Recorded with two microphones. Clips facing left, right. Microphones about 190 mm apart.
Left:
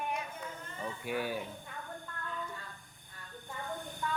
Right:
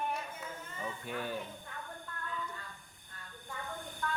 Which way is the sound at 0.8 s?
10° left (ahead or behind).